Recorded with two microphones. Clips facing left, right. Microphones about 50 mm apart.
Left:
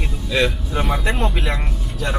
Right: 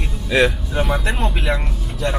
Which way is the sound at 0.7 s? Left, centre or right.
Centre.